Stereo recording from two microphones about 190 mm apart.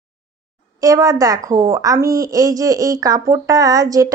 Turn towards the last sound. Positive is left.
turn(degrees=-20)  # may be behind; listen again after turning